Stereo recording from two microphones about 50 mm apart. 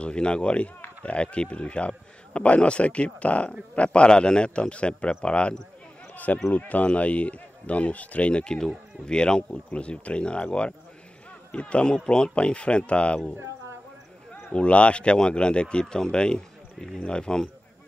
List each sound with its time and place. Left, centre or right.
0.0 s speech: centre
6.1 s basketball bounce: left
6.5 s speech: left
14.5 s speech: left